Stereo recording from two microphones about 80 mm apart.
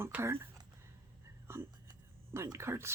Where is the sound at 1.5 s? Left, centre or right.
Right.